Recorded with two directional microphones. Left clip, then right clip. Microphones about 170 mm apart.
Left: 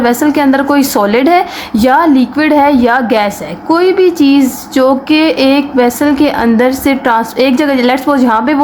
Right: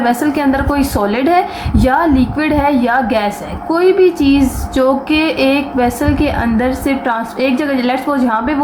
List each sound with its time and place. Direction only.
0.0 s a woman's voice: 45° left (ahead or behind)